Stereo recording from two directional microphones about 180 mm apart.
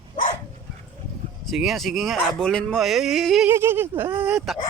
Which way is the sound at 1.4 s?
Centre (ahead or behind).